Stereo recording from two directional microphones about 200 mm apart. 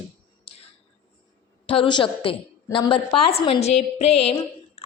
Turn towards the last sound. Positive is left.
turn(degrees=30)  # may be behind; listen again after turning